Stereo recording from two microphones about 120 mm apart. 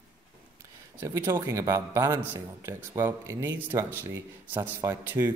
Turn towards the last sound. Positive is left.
turn(degrees=-15)  # may be behind; listen again after turning